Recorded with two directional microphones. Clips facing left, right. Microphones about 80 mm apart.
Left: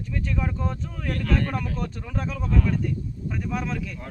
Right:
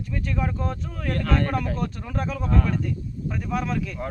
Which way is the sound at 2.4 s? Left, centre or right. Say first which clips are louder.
Right 1 dB; right.